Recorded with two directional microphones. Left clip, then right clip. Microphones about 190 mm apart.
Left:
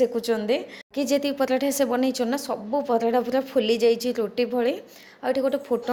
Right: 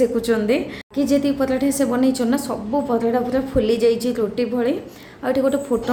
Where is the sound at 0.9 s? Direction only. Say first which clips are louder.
Right 4 dB; 40° left (ahead or behind).